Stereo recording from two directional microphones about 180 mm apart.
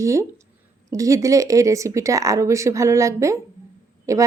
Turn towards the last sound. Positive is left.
turn(degrees=-15)  # may be behind; listen again after turning